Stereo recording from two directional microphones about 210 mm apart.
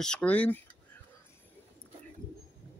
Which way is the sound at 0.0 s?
5° left (ahead or behind).